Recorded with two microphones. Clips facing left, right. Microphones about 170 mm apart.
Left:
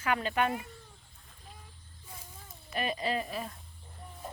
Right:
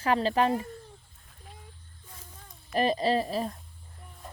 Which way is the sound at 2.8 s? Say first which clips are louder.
Right 7 dB; 35° right (ahead or behind).